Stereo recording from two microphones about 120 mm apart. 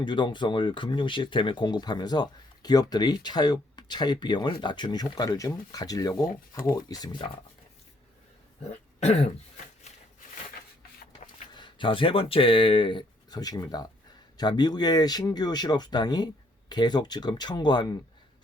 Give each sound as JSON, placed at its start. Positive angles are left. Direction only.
{"t": 0.0, "sound": "speech", "side_deg": 40}
{"t": 9.0, "sound": "throat clearing", "side_deg": 65}
{"t": 11.5, "sound": "speech", "side_deg": 40}